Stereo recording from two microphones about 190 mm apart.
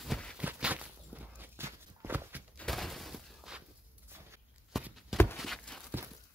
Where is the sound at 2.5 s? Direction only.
Centre (ahead or behind).